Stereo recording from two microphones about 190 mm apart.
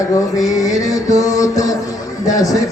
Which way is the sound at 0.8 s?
20° left (ahead or behind).